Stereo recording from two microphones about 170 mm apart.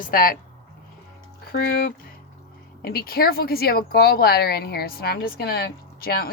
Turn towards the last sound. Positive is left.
turn(degrees=65)  # may be behind; listen again after turning